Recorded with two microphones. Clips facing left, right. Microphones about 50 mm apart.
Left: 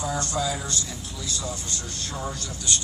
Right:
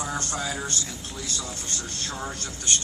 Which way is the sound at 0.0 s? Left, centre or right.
Right.